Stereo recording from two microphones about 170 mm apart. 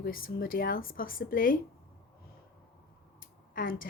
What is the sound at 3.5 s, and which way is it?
Speech, 55° left (ahead or behind).